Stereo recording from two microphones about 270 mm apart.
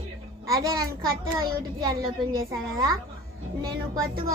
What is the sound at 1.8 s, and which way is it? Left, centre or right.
Child singing, centre.